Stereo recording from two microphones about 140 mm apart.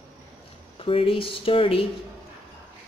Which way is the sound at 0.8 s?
40° left (ahead or behind).